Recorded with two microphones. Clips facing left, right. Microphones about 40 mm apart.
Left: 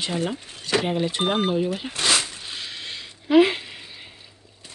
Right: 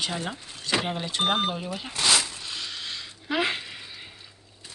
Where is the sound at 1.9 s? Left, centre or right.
Left.